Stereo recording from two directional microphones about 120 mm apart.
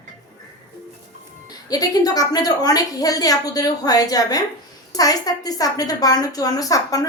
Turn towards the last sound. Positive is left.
turn(degrees=30)  # may be behind; listen again after turning